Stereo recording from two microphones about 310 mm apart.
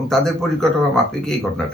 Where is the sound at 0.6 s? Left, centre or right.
Centre.